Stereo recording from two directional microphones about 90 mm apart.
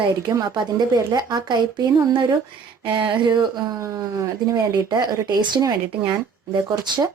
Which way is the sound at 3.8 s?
35° right (ahead or behind).